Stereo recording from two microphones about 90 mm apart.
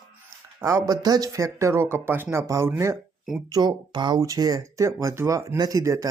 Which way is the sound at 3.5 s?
50° right (ahead or behind).